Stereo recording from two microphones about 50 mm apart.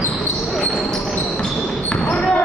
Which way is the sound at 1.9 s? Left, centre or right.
Centre.